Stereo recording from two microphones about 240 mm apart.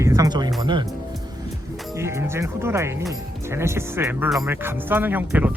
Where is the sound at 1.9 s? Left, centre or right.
Centre.